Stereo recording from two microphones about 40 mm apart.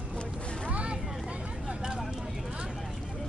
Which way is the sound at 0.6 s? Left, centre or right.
Right.